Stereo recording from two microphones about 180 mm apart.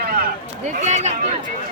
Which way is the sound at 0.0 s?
55° right (ahead or behind).